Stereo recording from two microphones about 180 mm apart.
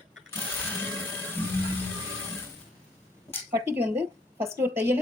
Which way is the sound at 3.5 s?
15° right (ahead or behind).